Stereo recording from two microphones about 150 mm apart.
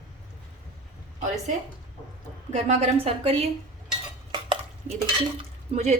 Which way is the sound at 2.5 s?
40° right (ahead or behind).